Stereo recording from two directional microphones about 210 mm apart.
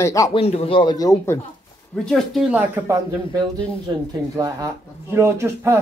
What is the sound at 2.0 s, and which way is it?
Speech, centre (ahead or behind).